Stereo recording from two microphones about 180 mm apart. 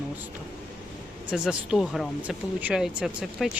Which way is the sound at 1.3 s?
5° right (ahead or behind).